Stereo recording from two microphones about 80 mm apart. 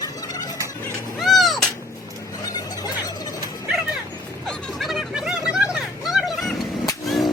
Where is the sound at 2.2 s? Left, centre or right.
Left.